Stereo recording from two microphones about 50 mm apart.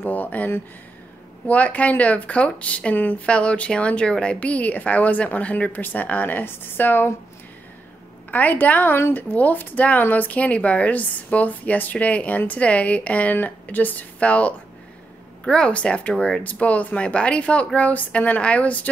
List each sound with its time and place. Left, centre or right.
0.0 s a woman's voice: left
1.5 s speech: left
8.3 s a woman's voice: left